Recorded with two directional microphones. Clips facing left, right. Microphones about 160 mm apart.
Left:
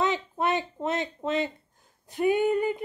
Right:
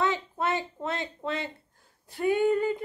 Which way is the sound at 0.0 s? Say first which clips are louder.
Left 1 dB; 20° left (ahead or behind).